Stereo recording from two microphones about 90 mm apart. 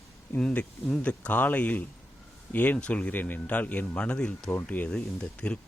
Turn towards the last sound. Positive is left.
turn(degrees=15)  # may be behind; listen again after turning